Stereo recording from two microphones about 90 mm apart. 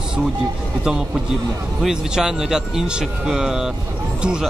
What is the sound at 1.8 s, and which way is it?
Speech, 5° right (ahead or behind).